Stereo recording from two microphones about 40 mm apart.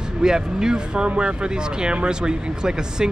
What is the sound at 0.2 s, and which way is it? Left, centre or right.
Speech, centre.